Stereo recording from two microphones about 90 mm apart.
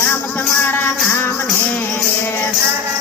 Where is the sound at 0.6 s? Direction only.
25° left (ahead or behind).